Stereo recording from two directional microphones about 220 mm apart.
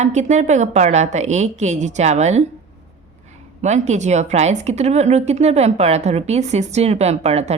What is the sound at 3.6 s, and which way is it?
Speech, 30° right (ahead or behind).